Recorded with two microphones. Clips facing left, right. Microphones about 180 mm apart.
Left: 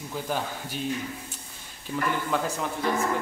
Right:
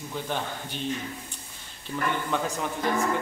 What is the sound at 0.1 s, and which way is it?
Speech, 5° left (ahead or behind).